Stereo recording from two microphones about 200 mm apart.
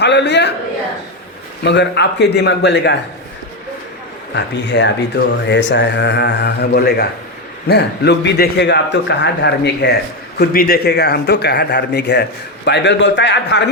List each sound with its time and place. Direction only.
0.0 s a man's voice: 60° left (ahead or behind)
1.6 s a man's voice: 60° left (ahead or behind)
4.4 s a man's voice: 60° left (ahead or behind)